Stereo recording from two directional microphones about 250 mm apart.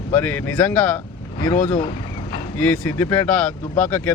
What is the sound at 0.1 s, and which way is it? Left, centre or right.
Speech, centre.